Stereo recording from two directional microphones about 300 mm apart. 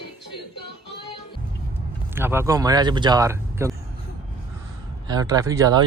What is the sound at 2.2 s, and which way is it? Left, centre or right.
Speech, centre.